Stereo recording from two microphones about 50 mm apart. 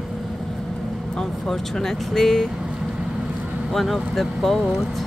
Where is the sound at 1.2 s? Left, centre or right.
Centre.